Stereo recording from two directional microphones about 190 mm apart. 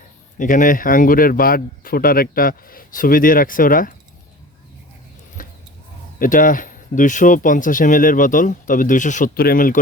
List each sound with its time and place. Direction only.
0.3 s speech: 45° left (ahead or behind)
5.4 s a sound: 45° left (ahead or behind)
6.1 s speech: 45° left (ahead or behind)